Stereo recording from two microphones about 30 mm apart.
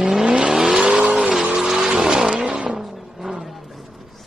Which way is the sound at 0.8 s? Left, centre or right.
Right.